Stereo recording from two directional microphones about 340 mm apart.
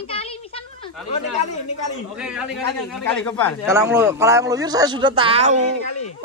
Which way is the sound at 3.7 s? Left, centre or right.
Centre.